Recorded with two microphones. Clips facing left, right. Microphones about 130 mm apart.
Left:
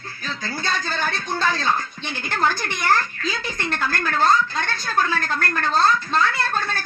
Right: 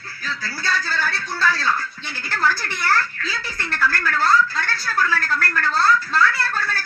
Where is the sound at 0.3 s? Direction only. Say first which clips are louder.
Even; 20° left (ahead or behind).